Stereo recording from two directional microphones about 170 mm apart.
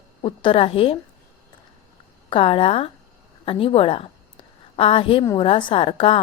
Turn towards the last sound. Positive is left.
turn(degrees=30)  # may be behind; listen again after turning